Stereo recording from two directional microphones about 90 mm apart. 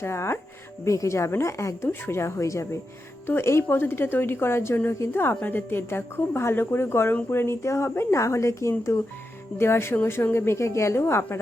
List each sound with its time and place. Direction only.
0.0 s a woman's voice: 30° left (ahead or behind)